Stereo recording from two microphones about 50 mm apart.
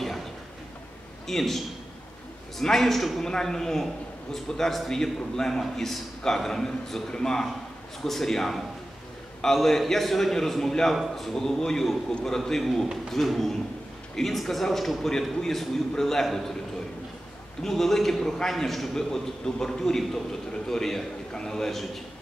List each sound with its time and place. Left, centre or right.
1.2 s a man's voice: centre
2.6 s a man's voice: centre
12.4 s a man's voice: centre
17.6 s a man's voice: centre